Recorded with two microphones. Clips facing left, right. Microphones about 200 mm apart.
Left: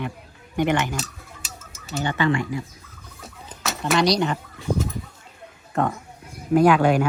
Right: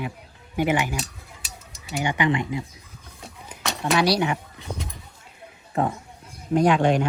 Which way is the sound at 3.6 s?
Centre (ahead or behind).